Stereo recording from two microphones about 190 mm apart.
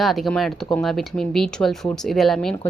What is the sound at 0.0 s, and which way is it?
A woman's voice, centre (ahead or behind).